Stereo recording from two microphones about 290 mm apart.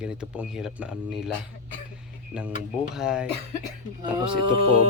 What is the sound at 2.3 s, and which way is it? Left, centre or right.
Speech, centre.